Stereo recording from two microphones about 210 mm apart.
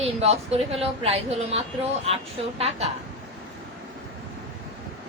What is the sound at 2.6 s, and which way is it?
Speech, 30° right (ahead or behind).